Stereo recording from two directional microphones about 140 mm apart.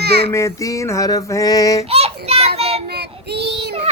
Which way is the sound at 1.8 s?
45° right (ahead or behind).